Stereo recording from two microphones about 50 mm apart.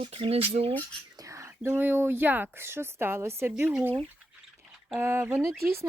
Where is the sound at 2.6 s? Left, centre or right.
Right.